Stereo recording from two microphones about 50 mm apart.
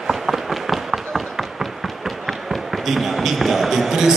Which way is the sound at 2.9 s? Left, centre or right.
Centre.